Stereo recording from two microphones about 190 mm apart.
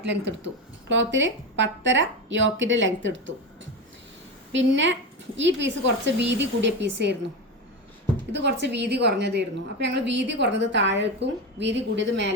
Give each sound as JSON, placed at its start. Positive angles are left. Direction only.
{"t": 0.0, "sound": "a woman's voice", "side_deg": -65}
{"t": 4.5, "sound": "a woman's voice", "side_deg": -75}
{"t": 8.3, "sound": "a woman's voice", "side_deg": -65}